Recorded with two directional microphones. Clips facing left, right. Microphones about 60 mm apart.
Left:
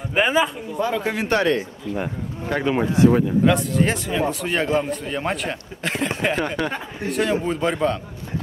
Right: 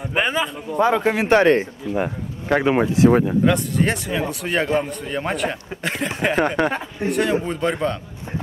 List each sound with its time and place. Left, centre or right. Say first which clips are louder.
0.1 s a man's voice: left 3 dB; centre
0.9 s speech: right 4 dB; right
1.4 s speech: right 5 dB; right
3.4 s a man's voice: even; centre
6.3 s speech: right 4 dB; right
7.1 s a man's voice: right 1 dB; centre